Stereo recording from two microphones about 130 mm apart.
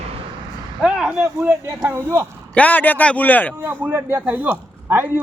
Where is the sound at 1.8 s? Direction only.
20° right (ahead or behind).